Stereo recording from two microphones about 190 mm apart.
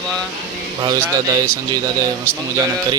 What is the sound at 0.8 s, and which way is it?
Speech, 20° right (ahead or behind).